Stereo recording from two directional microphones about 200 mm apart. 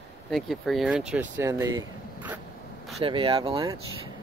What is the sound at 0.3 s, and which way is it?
Speech, centre (ahead or behind).